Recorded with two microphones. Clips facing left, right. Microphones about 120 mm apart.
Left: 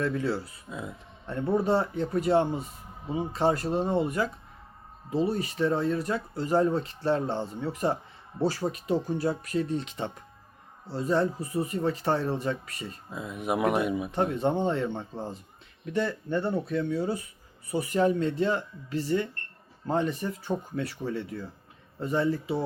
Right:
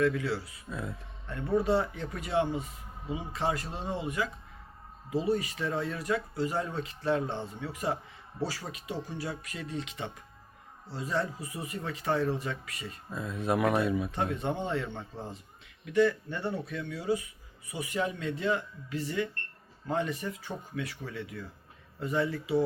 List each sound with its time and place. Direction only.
0.0 s speech: 30° left (ahead or behind)
0.7 s speech: 20° left (ahead or behind)
1.3 s speech: 30° left (ahead or behind)
5.1 s speech: 30° left (ahead or behind)
13.1 s speech: 20° left (ahead or behind)
14.2 s speech: 30° left (ahead or behind)